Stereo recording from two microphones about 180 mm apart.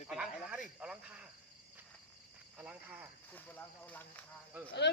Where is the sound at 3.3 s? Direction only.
10° left (ahead or behind).